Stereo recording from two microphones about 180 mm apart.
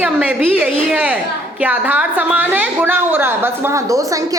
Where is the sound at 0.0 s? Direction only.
5° right (ahead or behind).